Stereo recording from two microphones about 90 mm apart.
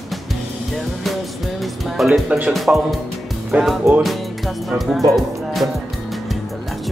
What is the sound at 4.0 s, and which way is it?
Speech, centre (ahead or behind).